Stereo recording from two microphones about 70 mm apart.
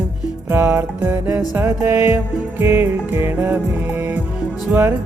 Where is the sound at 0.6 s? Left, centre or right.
Right.